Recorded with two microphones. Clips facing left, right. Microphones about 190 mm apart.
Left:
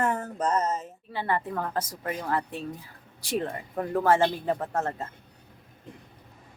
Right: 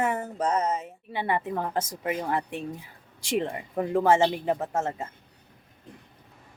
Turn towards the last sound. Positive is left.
turn(degrees=-10)  # may be behind; listen again after turning